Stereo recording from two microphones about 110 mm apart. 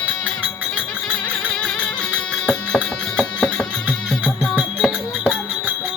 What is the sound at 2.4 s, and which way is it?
Music, 10° left (ahead or behind).